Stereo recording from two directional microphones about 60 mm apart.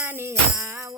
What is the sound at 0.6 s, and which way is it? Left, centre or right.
Music, right.